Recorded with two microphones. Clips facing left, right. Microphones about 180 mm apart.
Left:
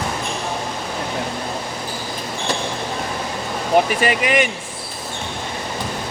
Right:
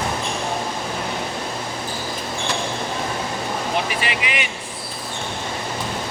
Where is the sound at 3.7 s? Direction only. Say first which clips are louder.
Left 12 dB; 45° left (ahead or behind).